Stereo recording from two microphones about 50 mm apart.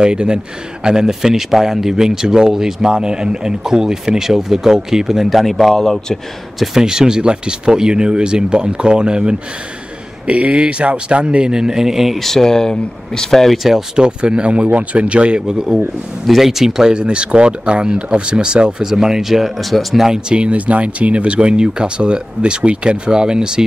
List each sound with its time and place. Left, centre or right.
0.0 s speech: centre
6.6 s speech: centre
12.2 s speech: centre
13.9 s speech: centre
16.9 s speech: centre
20.1 s speech: right